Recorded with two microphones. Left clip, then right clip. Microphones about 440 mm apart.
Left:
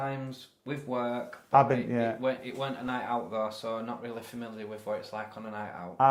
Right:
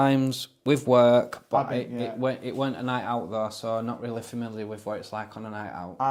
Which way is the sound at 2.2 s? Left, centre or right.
Right.